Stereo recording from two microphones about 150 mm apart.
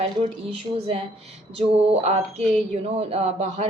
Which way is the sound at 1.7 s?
45° right (ahead or behind).